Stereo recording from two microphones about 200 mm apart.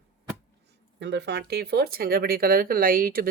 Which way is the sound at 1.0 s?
60° right (ahead or behind).